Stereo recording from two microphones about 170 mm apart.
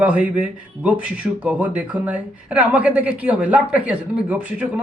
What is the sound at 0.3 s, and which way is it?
Speech, 5° right (ahead or behind).